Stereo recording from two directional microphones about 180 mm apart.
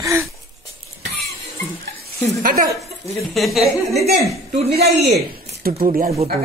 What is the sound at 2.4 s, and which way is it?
Speech, 55° right (ahead or behind).